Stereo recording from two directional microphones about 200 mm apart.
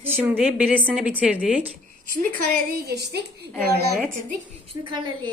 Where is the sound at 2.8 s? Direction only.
55° right (ahead or behind).